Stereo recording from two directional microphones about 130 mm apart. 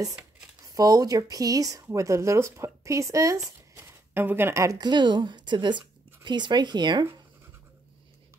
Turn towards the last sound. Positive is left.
turn(degrees=-35)  # may be behind; listen again after turning